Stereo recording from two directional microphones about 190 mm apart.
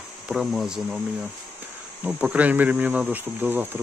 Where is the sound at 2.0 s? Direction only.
10° right (ahead or behind).